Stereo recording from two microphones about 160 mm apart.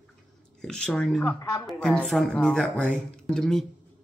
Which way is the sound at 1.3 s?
25° left (ahead or behind).